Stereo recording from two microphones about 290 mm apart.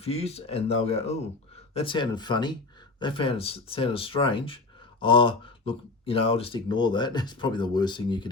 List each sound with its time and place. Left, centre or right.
0.0 s speech: left